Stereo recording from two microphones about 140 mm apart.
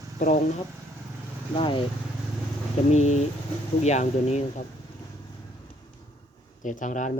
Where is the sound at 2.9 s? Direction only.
55° left (ahead or behind).